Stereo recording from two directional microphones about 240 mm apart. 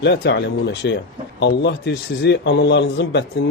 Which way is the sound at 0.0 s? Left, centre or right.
Left.